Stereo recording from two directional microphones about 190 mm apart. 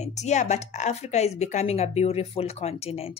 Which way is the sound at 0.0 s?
35° left (ahead or behind).